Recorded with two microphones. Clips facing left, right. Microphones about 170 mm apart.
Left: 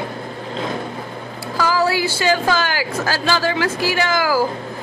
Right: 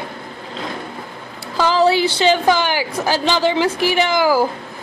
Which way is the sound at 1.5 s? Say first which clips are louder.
Right 4 dB; 20° right (ahead or behind).